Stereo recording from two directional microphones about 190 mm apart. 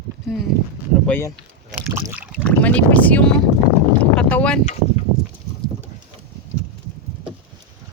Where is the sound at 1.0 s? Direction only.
10° left (ahead or behind).